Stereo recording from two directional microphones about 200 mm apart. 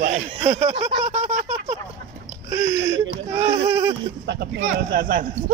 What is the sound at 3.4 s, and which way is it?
Speech, 30° right (ahead or behind).